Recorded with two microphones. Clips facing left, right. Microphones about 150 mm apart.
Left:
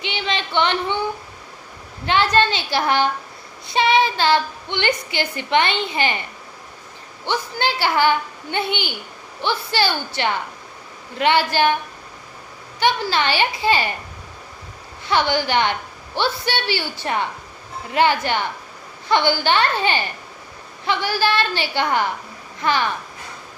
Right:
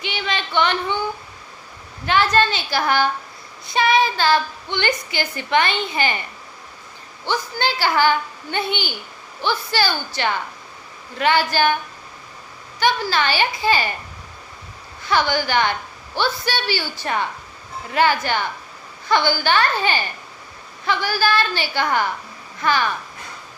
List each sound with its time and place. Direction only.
0.0 s a sound: 25° left (ahead or behind)
2.0 s a woman's voice: 25° left (ahead or behind)
7.3 s a woman's voice: 20° left (ahead or behind)
12.8 s a woman's voice: 25° left (ahead or behind)
15.0 s a woman's voice: 25° left (ahead or behind)